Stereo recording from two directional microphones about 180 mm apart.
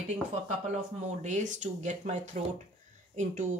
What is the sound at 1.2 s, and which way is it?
Speech, 45° right (ahead or behind).